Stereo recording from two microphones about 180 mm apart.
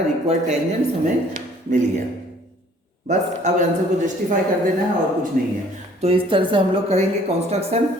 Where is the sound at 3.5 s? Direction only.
40° right (ahead or behind).